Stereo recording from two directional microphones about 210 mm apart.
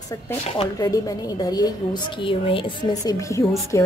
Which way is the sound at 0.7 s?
15° left (ahead or behind).